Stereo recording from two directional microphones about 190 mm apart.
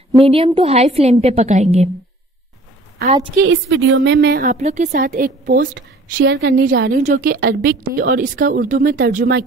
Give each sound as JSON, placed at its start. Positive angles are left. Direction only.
{"t": 0.2, "sound": "a woman's voice", "side_deg": -30}
{"t": 3.3, "sound": "a woman's voice", "side_deg": -70}
{"t": 4.5, "sound": "a woman's voice", "side_deg": -35}
{"t": 7.0, "sound": "a woman's voice", "side_deg": -40}